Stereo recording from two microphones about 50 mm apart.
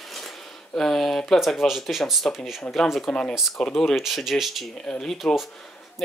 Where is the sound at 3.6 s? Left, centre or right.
Centre.